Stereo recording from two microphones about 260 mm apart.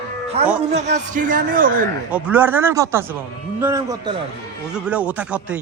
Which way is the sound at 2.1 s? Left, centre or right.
Centre.